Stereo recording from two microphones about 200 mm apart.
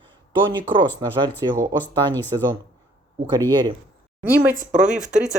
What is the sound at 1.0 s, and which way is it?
Speech, 25° right (ahead or behind).